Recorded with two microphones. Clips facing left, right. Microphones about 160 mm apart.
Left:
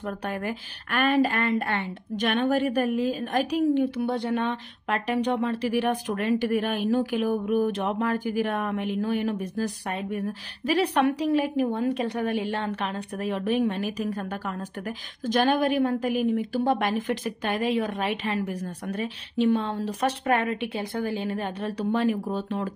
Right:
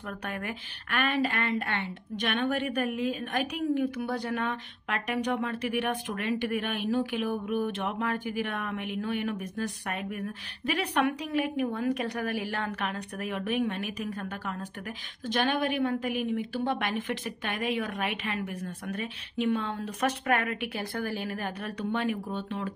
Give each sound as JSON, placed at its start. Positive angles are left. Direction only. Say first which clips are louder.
{"t": 0.3, "sound": "speech", "louder": "left 5 dB", "side_deg": 30}
{"t": 15.2, "sound": "speech", "louder": "left 5 dB", "side_deg": 40}